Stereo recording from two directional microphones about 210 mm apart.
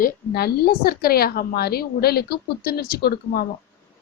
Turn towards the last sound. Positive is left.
turn(degrees=45)  # may be behind; listen again after turning